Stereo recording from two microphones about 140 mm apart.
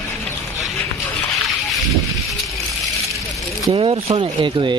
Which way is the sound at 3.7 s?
40° right (ahead or behind).